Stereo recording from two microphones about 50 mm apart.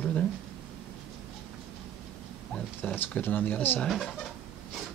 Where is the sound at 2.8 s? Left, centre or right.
Left.